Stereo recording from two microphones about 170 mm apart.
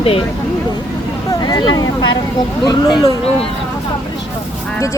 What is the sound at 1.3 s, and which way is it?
Vehicle, 20° left (ahead or behind).